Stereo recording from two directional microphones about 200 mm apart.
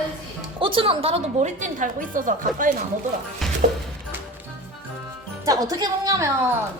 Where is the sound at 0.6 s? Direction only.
25° right (ahead or behind); by 2.8 s 40° right (ahead or behind).